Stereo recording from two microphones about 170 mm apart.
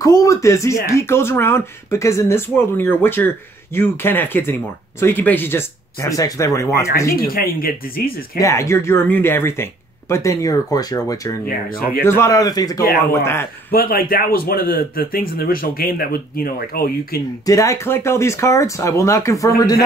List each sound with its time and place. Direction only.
0.0 s speech: 20° left (ahead or behind)
7.2 s a man's voice: 60° left (ahead or behind)
8.4 s speech: 15° left (ahead or behind)
13.7 s a man's voice: 60° left (ahead or behind)
17.5 s speech: 20° left (ahead or behind)